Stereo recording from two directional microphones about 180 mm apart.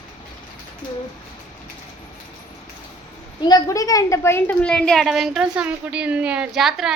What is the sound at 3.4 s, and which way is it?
A woman's voice, 20° left (ahead or behind).